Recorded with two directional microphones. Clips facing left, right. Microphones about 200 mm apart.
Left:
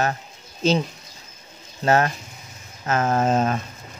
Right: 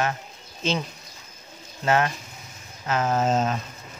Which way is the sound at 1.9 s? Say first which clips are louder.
Left 3 dB; 40° left (ahead or behind).